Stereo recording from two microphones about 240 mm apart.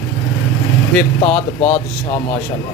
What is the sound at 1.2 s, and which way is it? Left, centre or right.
Speech, left.